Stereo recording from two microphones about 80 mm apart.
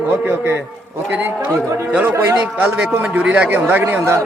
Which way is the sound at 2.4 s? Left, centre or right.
Centre.